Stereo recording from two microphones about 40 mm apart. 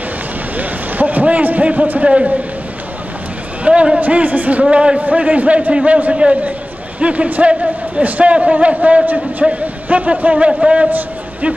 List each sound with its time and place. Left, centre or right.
0.6 s a sound: right
3.6 s a man's voice: right
4.0 s a man's voice: right
4.6 s a man's voice: right
10.3 s a man's voice: right